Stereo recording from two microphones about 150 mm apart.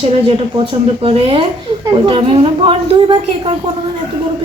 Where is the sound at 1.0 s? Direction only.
35° right (ahead or behind).